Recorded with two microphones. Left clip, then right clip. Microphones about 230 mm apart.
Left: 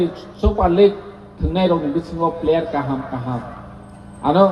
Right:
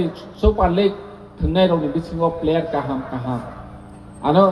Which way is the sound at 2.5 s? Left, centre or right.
Right.